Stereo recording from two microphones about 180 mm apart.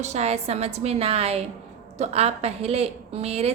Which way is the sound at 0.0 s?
40° right (ahead or behind).